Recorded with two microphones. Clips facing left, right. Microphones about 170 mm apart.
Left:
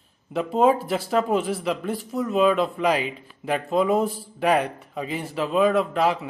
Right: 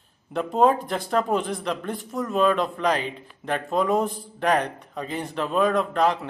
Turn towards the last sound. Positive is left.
turn(degrees=5)  # may be behind; listen again after turning